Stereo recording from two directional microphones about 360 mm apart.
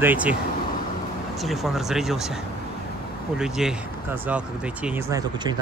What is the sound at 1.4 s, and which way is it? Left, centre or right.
Speech, centre.